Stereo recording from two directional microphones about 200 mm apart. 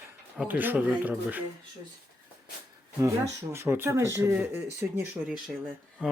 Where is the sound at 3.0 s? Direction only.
15° right (ahead or behind).